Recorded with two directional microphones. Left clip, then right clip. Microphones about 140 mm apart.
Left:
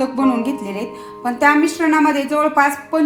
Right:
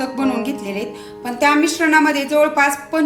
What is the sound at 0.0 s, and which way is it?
A woman's voice, 35° left (ahead or behind).